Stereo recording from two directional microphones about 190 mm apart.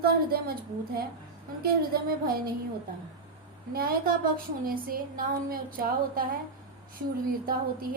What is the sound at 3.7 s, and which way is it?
A woman's voice, 50° right (ahead or behind).